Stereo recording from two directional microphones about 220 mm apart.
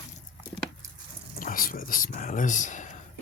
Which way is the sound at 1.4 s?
40° left (ahead or behind).